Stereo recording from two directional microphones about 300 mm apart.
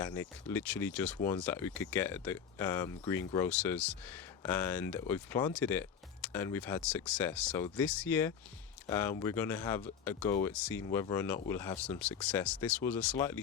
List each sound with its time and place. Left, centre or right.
0.0 s speech: centre
10.8 s speech: centre
11.1 s speech: centre